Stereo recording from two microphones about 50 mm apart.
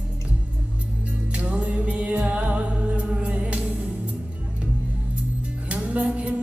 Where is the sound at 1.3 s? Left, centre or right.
Right.